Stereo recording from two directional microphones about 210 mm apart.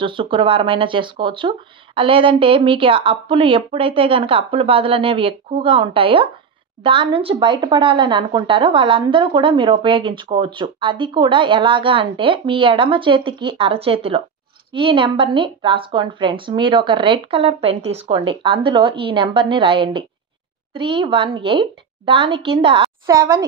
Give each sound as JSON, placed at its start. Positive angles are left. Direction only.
{"t": 0.0, "sound": "speech", "side_deg": -25}